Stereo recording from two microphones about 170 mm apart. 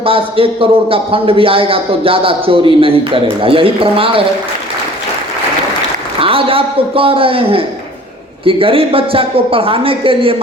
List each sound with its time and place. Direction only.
0.0 s a man's voice: 35° right (ahead or behind)
6.1 s a man's voice: 35° right (ahead or behind)